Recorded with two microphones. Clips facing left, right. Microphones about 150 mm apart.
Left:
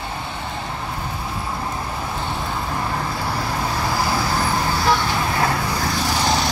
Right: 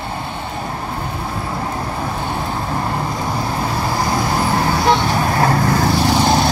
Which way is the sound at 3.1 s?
25° right (ahead or behind).